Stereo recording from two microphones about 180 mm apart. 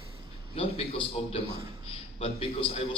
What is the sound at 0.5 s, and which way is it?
A man's voice, 35° left (ahead or behind).